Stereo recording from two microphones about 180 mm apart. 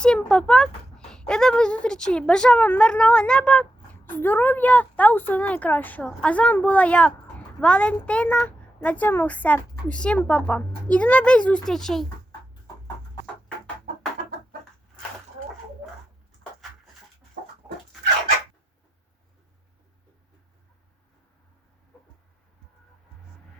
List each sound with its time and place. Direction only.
0.0 s a woman's voice: 5° left (ahead or behind)
17.4 s chicken: 50° right (ahead or behind)